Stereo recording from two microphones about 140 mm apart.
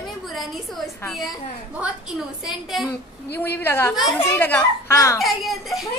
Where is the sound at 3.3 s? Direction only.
15° left (ahead or behind).